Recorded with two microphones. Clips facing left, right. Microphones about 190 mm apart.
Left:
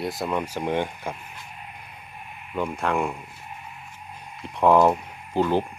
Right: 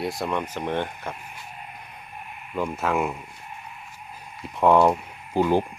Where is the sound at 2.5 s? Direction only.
Centre (ahead or behind).